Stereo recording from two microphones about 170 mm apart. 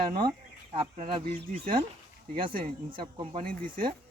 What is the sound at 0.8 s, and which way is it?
Speech, 35° right (ahead or behind).